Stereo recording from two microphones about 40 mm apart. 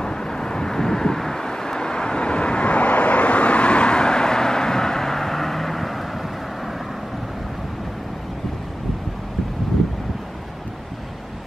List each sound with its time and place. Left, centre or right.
0.0 s vehicle: centre